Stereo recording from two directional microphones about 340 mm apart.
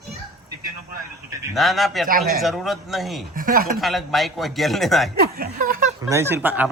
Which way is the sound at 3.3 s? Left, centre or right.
Right.